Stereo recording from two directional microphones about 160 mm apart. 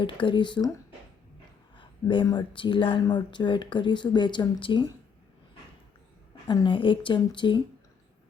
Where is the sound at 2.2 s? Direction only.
30° left (ahead or behind).